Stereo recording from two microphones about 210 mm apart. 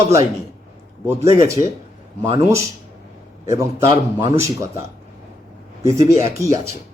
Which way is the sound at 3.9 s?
20° right (ahead or behind).